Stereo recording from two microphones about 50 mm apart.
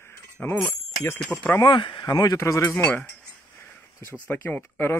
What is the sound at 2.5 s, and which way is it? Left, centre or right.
Speech, left.